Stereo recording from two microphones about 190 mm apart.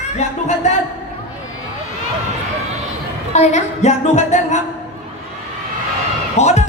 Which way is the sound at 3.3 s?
35° left (ahead or behind).